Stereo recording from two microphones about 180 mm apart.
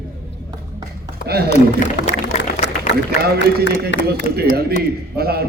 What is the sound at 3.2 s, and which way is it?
A man's voice, 60° right (ahead or behind).